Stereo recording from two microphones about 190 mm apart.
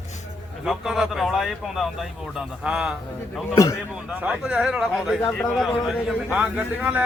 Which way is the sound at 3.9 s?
5° right (ahead or behind).